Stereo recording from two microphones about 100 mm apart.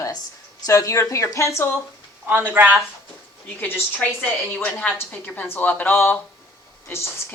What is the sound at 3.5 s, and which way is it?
A woman's voice, 25° left (ahead or behind).